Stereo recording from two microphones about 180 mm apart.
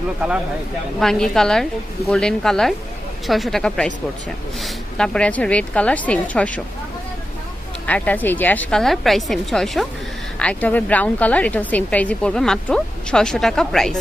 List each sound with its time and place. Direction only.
0.9 s a woman's voice: centre (ahead or behind)
7.9 s a woman's voice: 10° left (ahead or behind)